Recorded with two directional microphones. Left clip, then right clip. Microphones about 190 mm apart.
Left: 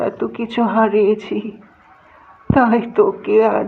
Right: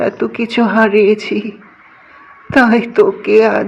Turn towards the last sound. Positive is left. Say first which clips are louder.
# right 4 dB
turn(degrees=-25)  # may be behind; listen again after turning